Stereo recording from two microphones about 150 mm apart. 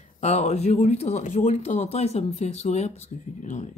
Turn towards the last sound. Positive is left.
turn(degrees=50)  # may be behind; listen again after turning